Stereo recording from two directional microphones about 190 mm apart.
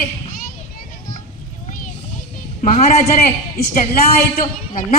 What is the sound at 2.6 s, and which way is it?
Speech, 35° left (ahead or behind).